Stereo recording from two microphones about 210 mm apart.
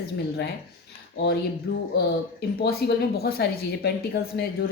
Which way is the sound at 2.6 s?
50° left (ahead or behind).